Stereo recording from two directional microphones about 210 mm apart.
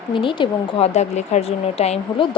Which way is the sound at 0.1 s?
25° left (ahead or behind).